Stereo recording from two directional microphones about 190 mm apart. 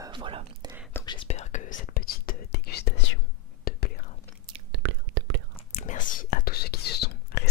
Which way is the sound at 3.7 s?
50° left (ahead or behind).